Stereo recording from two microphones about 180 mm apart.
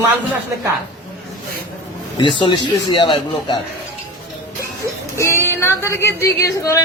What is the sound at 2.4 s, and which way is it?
Speech, 25° left (ahead or behind).